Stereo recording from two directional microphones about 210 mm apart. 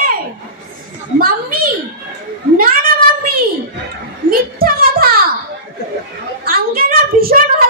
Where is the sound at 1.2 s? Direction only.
45° right (ahead or behind).